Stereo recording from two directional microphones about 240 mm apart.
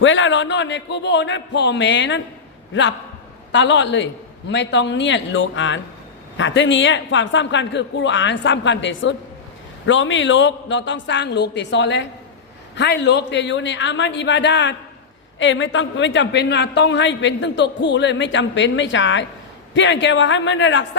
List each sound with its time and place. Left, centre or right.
0.0 s a woman's voice: left